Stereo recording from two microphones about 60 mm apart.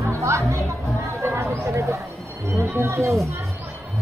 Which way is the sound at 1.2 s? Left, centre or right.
Right.